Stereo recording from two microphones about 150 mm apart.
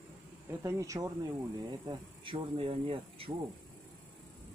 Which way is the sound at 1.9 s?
35° right (ahead or behind).